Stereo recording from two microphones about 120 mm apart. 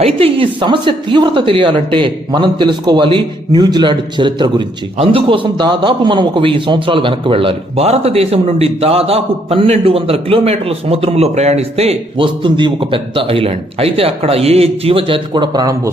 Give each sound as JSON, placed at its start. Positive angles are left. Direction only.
{"t": 0.0, "sound": "a man's voice", "side_deg": -50}
{"t": 12.1, "sound": "speech", "side_deg": -45}
{"t": 15.3, "sound": "a man's voice", "side_deg": -35}